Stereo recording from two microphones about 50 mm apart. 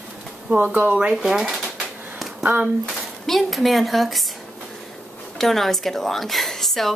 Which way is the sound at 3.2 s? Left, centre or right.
Centre.